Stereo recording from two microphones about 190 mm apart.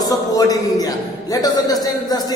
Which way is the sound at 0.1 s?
20° left (ahead or behind).